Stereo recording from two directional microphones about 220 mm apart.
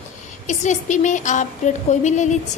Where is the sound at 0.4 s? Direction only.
35° left (ahead or behind).